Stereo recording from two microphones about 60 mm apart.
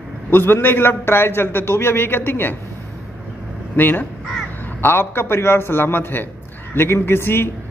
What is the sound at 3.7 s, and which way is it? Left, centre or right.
A man's voice, left.